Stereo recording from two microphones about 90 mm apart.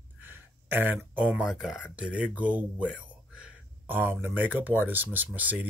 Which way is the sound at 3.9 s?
25° right (ahead or behind).